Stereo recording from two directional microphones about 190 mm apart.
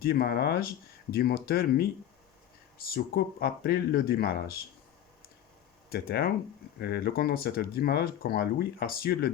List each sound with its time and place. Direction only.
0.0 s speech: 55° left (ahead or behind)
2.9 s speech: 55° left (ahead or behind)
5.9 s speech: 55° left (ahead or behind)